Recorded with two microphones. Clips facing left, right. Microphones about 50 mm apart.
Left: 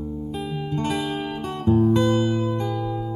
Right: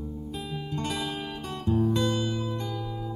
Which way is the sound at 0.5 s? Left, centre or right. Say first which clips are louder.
Left 6 dB; left.